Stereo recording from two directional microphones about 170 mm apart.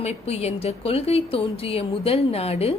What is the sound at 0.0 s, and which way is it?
A woman's voice, 40° left (ahead or behind).